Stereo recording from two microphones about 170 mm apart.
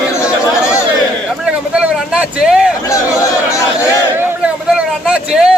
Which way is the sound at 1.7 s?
5° right (ahead or behind).